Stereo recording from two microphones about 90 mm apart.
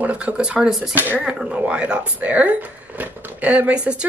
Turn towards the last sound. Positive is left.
turn(degrees=-15)  # may be behind; listen again after turning